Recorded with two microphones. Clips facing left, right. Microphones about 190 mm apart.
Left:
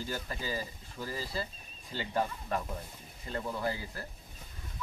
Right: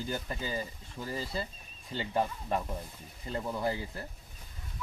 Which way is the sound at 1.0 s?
25° right (ahead or behind).